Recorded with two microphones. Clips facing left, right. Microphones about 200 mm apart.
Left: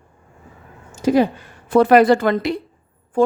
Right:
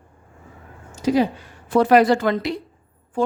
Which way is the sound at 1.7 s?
55° left (ahead or behind).